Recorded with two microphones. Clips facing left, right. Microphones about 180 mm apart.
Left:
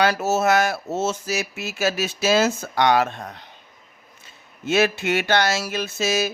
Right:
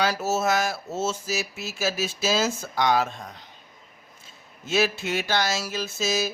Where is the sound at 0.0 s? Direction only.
65° left (ahead or behind).